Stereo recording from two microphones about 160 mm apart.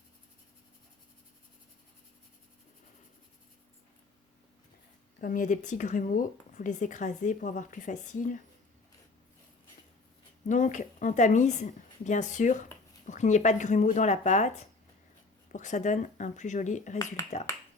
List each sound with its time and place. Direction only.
5.2 s speech: 55° left (ahead or behind)
10.5 s speech: 50° left (ahead or behind)